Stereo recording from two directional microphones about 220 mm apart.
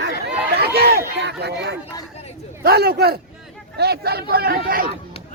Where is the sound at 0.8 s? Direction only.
45° right (ahead or behind).